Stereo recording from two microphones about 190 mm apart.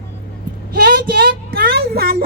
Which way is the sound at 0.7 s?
50° right (ahead or behind).